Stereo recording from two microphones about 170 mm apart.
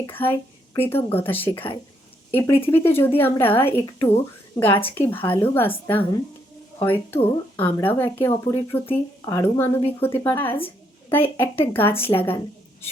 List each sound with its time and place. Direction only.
0.0 s speech: 10° left (ahead or behind)
3.7 s a woman's voice: 35° left (ahead or behind)
4.9 s speech: 10° left (ahead or behind)